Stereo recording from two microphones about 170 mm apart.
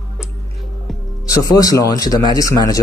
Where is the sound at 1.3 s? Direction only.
20° left (ahead or behind).